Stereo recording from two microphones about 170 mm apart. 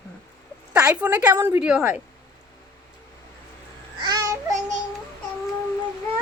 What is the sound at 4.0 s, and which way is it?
Babbling, 20° right (ahead or behind).